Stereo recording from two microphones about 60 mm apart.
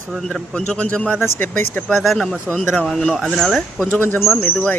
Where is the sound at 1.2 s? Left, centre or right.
Left.